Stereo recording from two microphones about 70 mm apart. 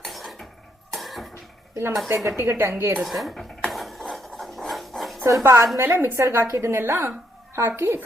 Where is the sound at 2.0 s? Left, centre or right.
Right.